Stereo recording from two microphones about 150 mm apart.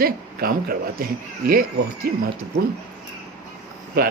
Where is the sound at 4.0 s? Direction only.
80° right.